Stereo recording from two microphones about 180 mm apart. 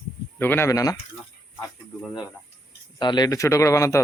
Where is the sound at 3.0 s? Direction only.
25° left (ahead or behind).